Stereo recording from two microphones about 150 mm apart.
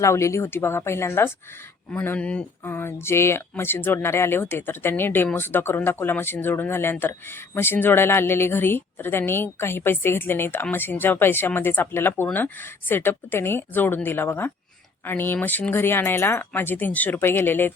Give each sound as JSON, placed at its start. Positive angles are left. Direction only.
{"t": 0.0, "sound": "speech", "side_deg": 20}